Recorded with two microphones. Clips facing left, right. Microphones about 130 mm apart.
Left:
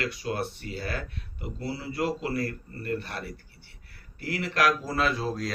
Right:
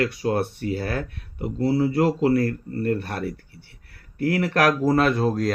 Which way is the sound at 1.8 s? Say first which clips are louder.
Right 8 dB; 45° right (ahead or behind).